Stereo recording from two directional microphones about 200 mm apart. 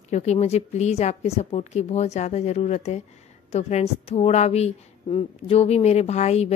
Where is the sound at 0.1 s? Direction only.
35° left (ahead or behind).